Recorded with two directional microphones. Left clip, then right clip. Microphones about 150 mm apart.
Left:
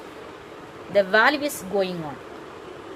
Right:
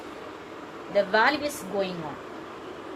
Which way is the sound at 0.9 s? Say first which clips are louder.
Left 4 dB; 85° left.